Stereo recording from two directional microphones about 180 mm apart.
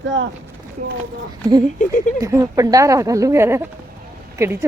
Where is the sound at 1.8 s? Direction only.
45° left (ahead or behind).